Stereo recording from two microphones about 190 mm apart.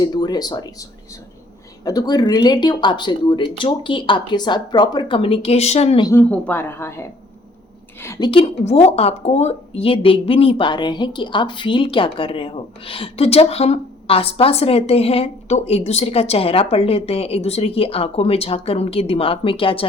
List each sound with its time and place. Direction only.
0.0 s speech: 20° left (ahead or behind)
6.1 s a woman's voice: 10° left (ahead or behind)
8.3 s speech: 30° left (ahead or behind)